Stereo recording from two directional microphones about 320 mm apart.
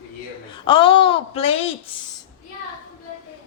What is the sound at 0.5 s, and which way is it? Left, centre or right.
Speech, centre.